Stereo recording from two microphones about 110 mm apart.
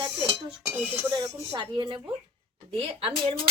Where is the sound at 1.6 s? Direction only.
50° right (ahead or behind).